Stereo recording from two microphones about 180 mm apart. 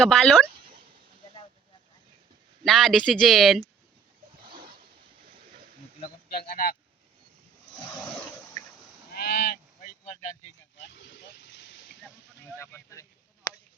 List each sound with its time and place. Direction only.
0.0 s speech: 5° left (ahead or behind)
2.6 s speech: centre (ahead or behind)
6.0 s speech: 50° left (ahead or behind)
9.1 s honk: 60° left (ahead or behind)
10.0 s speech: 40° left (ahead or behind)
10.8 s vehicle: 80° left
12.5 s a sound: 15° left (ahead or behind)